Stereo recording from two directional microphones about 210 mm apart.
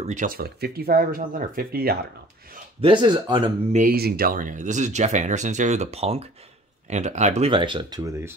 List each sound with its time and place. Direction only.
0.0 s speech: 35° right (ahead or behind)
2.8 s speech: 20° right (ahead or behind)
3.7 s speech: 45° right (ahead or behind); by 8.4 s 15° right (ahead or behind)